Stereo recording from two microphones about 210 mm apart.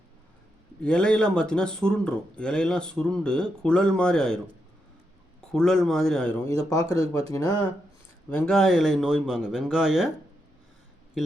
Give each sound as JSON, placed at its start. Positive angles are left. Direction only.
{"t": 0.8, "sound": "speech", "side_deg": 5}
{"t": 5.5, "sound": "speech", "side_deg": 0}
{"t": 8.3, "sound": "speech", "side_deg": 5}